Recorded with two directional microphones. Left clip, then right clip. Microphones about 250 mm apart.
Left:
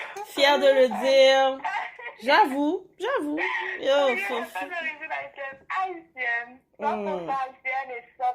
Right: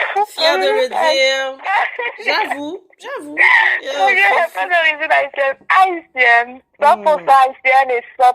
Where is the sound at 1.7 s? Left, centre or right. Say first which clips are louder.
Right 15 dB; right.